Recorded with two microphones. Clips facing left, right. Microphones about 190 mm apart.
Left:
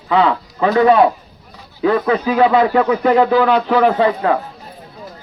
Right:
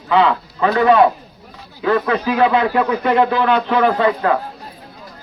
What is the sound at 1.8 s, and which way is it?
Speech, 30° left (ahead or behind).